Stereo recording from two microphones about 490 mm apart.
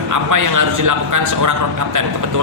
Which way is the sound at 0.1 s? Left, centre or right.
Right.